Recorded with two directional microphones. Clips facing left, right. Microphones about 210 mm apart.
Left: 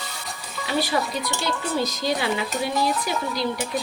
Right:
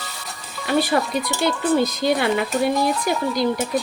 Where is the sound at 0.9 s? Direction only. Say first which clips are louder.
Right 4 dB; 55° right (ahead or behind).